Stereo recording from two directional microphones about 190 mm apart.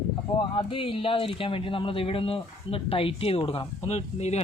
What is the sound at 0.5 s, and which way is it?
Speech, 25° left (ahead or behind).